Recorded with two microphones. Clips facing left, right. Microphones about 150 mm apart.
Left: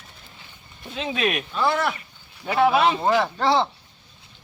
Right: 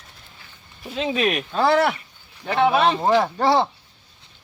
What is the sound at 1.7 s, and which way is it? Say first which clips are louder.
Speech: right 9 dB; 65° right (ahead or behind).